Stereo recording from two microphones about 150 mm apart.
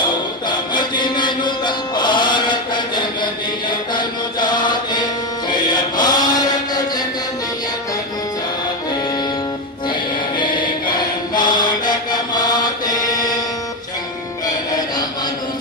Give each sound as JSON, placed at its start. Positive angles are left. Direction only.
{"t": 0.0, "sound": "music", "side_deg": 30}
{"t": 3.9, "sound": "mantra", "side_deg": 30}
{"t": 5.5, "sound": "chant", "side_deg": 30}
{"t": 9.8, "sound": "music", "side_deg": 30}
{"t": 11.3, "sound": "mantra", "side_deg": 30}